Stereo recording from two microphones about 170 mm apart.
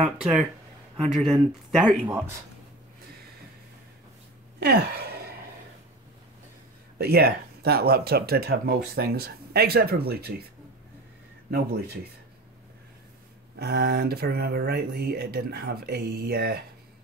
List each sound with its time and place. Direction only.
0.2 s speech: centre (ahead or behind)
2.1 s speech: 15° right (ahead or behind)
4.6 s a sound: 70° right (ahead or behind)
7.0 s speech: 65° right (ahead or behind)
13.6 s speech: 70° right (ahead or behind)